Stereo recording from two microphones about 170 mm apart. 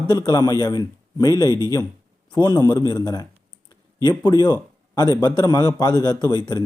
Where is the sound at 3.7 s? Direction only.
20° left (ahead or behind).